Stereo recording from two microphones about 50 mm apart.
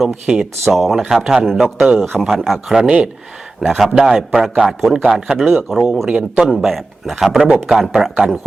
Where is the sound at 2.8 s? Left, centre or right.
Right.